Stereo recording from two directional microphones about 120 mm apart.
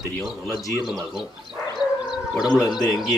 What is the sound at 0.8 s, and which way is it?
Speech, 5° right (ahead or behind).